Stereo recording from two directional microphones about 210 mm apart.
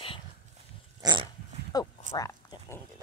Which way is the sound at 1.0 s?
20° right (ahead or behind).